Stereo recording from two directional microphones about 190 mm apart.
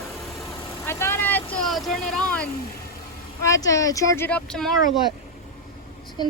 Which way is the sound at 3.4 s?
15° left (ahead or behind).